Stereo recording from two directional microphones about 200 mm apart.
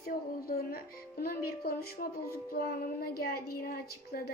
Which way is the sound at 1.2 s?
50° left (ahead or behind).